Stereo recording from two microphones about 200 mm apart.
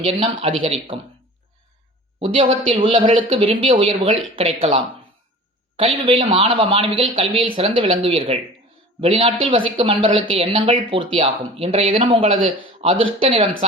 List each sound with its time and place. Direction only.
0.0 s speech: 30° right (ahead or behind)
2.1 s speech: 25° right (ahead or behind)